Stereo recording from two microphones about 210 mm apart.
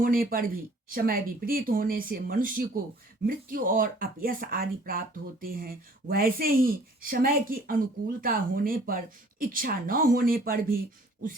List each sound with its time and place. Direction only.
0.0 s speech: 45° right (ahead or behind)